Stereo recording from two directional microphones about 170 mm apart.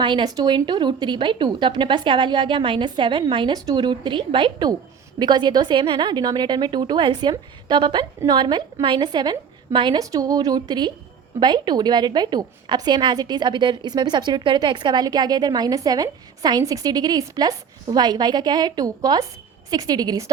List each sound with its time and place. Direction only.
0.0 s a woman's voice: 30° right (ahead or behind)